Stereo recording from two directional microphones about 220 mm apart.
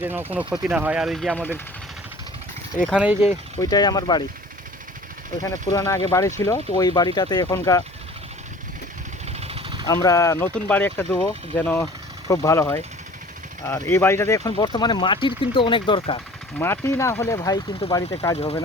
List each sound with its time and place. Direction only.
0.0 s speech: 10° right (ahead or behind)
2.8 s speech: 5° right (ahead or behind)
3.6 s speech: 15° left (ahead or behind)
5.4 s speech: 15° left (ahead or behind)
9.4 s vehicle: 25° right (ahead or behind)
10.0 s speech: 15° left (ahead or behind)
16.6 s speech: 10° left (ahead or behind)
18.3 s speech: 25° left (ahead or behind)